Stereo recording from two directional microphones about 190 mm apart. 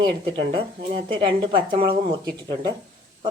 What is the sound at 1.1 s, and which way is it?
Speech, 25° right (ahead or behind).